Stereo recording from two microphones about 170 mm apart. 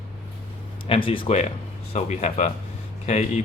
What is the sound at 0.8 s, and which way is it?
Speech, 30° left (ahead or behind).